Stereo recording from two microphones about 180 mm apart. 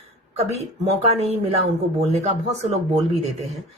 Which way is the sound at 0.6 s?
40° right (ahead or behind).